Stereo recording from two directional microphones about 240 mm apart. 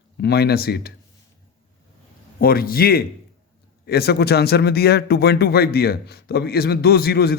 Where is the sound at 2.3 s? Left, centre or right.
Left.